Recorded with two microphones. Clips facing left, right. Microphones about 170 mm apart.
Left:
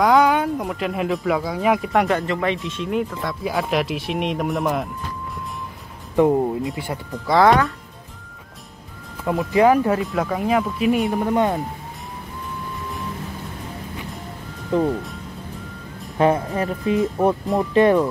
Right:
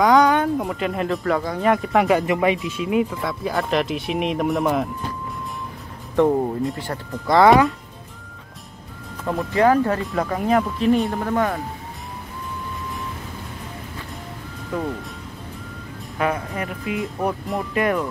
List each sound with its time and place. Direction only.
0.0 s speech: centre (ahead or behind)
2.1 s speech: 15° right (ahead or behind)
6.1 s speech: 5° left (ahead or behind)
9.2 s speech: 5° left (ahead or behind)
9.5 s speech: 15° left (ahead or behind)
10.0 s speech: centre (ahead or behind)
11.2 s speech: 20° left (ahead or behind)
14.7 s speech: 25° left (ahead or behind)
16.2 s speech: 30° left (ahead or behind)